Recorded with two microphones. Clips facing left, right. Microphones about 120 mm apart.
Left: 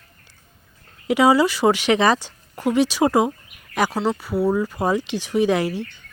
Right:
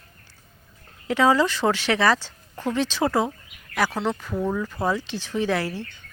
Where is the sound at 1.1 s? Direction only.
10° left (ahead or behind).